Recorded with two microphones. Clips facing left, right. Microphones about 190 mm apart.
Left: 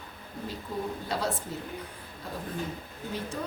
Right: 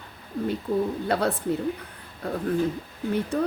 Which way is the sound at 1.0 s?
60° right (ahead or behind).